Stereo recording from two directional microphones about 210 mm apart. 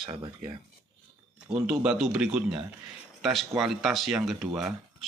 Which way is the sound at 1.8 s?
Centre (ahead or behind).